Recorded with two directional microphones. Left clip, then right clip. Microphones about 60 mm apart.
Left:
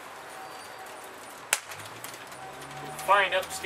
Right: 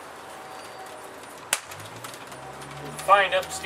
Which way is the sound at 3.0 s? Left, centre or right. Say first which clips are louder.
Right 4 dB; centre.